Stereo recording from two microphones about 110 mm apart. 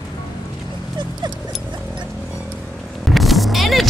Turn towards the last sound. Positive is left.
turn(degrees=0)  # may be behind; listen again after turning